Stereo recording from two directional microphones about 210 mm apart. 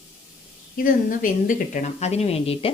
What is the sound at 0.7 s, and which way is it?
Speech, 40° left (ahead or behind).